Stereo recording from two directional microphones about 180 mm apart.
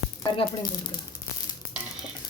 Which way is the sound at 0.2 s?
25° left (ahead or behind).